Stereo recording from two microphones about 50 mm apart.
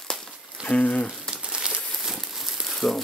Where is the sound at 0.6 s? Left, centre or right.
Centre.